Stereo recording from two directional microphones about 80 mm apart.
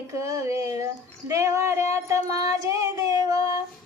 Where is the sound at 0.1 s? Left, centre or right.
Right.